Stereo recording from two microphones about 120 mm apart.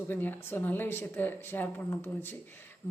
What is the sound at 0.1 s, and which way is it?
Speech, 15° left (ahead or behind).